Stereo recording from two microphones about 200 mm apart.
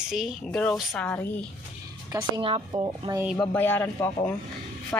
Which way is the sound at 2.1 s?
20° right (ahead or behind).